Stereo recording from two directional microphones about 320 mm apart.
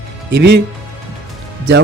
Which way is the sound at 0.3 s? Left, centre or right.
Right.